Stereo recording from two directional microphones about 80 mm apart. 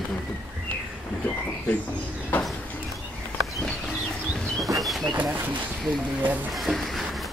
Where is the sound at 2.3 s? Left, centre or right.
Centre.